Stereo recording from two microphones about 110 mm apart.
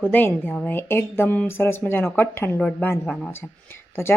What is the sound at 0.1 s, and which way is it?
A woman's voice, 15° left (ahead or behind).